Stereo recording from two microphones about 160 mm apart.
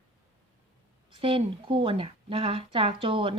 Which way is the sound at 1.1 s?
35° right (ahead or behind).